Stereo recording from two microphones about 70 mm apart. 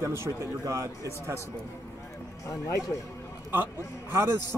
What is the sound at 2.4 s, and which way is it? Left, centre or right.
Speech, left.